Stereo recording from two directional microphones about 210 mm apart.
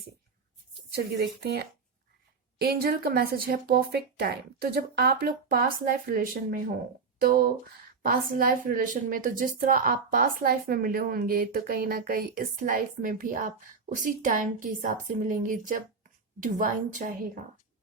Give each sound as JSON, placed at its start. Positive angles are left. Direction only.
{"t": 0.9, "sound": "a woman's voice", "side_deg": -55}